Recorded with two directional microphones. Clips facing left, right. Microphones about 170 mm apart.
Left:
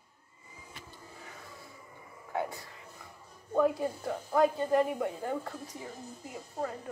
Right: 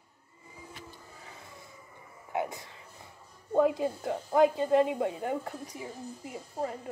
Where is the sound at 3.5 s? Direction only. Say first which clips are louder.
Right 2 dB; 20° right (ahead or behind).